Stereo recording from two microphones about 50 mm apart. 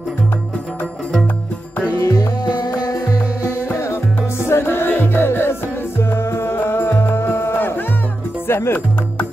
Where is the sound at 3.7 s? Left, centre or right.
Left.